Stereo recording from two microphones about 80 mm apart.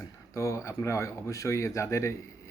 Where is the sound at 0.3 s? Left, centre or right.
Left.